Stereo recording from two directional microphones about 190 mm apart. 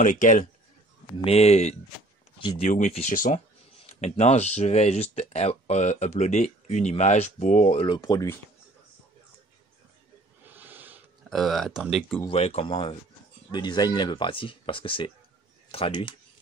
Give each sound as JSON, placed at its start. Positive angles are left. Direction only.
{"t": 0.0, "sound": "speech", "side_deg": 45}
{"t": 1.2, "sound": "speech", "side_deg": 30}
{"t": 7.8, "sound": "speech", "side_deg": 20}
{"t": 10.4, "sound": "snort", "side_deg": -10}
{"t": 11.2, "sound": "speech", "side_deg": 0}
{"t": 12.3, "sound": "speech", "side_deg": 30}